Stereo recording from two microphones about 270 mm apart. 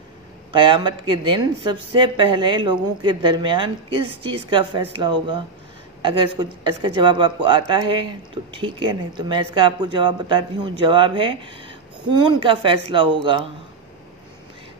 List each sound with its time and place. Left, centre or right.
0.5 s speech: centre